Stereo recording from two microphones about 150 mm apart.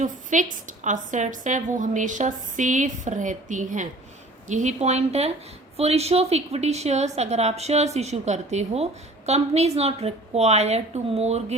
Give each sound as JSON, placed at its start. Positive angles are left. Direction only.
{"t": 0.0, "sound": "a woman's voice", "side_deg": -55}